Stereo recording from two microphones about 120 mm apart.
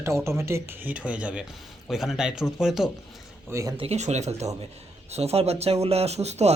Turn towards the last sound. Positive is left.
turn(degrees=-65)  # may be behind; listen again after turning